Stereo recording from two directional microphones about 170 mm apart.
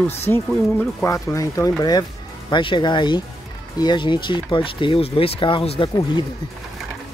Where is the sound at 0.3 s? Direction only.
15° left (ahead or behind); by 5.9 s 30° left (ahead or behind).